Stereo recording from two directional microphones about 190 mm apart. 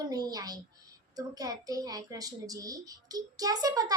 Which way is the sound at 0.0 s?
20° right (ahead or behind).